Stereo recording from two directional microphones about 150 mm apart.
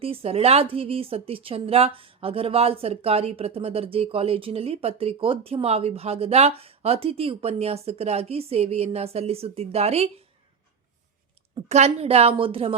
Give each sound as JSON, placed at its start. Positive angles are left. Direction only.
{"t": 0.0, "sound": "speech", "side_deg": -40}
{"t": 11.7, "sound": "speech", "side_deg": -45}